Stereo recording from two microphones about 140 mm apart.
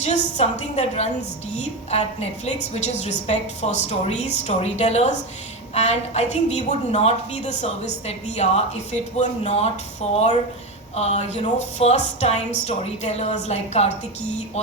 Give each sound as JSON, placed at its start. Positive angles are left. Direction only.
{"t": 0.0, "sound": "a woman's voice", "side_deg": 55}